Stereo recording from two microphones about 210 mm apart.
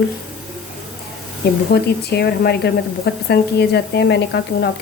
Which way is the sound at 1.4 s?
50° left (ahead or behind).